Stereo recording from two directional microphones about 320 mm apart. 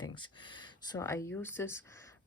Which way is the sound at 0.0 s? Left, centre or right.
Centre.